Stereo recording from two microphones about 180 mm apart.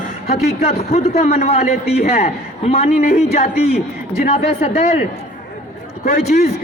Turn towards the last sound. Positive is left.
turn(degrees=40)  # may be behind; listen again after turning